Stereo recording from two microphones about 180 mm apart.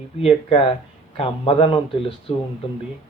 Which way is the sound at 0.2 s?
30° left (ahead or behind).